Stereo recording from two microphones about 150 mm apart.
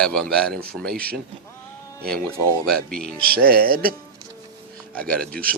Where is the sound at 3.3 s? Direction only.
85° right.